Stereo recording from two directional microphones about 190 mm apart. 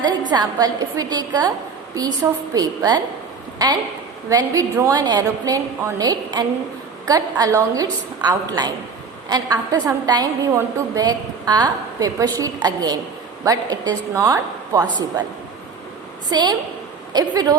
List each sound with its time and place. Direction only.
0.3 s a woman's voice: 20° right (ahead or behind)
4.3 s a woman's voice: 20° right (ahead or behind)
16.3 s a woman's voice: 20° right (ahead or behind)